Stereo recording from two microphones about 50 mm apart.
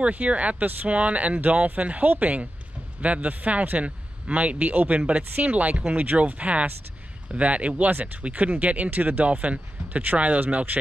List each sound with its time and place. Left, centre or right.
0.0 s speech: right